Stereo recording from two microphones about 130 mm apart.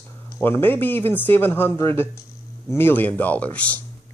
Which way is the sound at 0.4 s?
15° left (ahead or behind).